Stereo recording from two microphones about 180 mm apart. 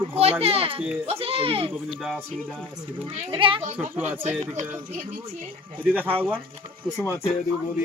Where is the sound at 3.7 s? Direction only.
10° right (ahead or behind).